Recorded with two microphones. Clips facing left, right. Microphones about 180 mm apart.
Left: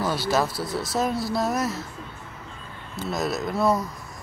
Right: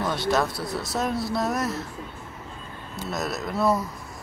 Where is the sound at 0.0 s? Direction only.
5° left (ahead or behind).